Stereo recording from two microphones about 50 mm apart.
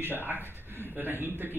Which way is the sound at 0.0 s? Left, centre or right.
Right.